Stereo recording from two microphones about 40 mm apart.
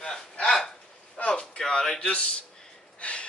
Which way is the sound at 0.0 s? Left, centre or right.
Centre.